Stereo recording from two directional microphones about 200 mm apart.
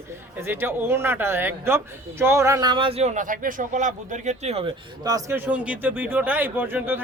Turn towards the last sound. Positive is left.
turn(degrees=-10)  # may be behind; listen again after turning